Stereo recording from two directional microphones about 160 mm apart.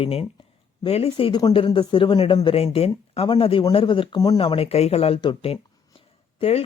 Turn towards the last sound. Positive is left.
turn(degrees=40)  # may be behind; listen again after turning